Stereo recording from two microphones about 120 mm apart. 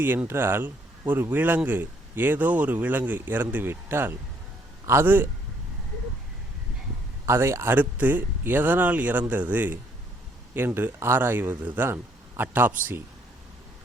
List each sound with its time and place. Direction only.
0.0 s a man's voice: 15° right (ahead or behind)
7.3 s speech: 20° right (ahead or behind)